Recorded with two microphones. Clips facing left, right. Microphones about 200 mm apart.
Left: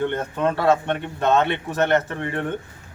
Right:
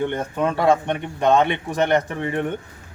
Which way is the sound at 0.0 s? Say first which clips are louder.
Even; 15° right (ahead or behind).